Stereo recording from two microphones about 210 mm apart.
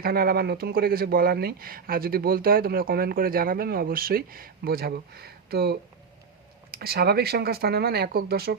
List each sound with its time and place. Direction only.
0.0 s speech: 45° right (ahead or behind)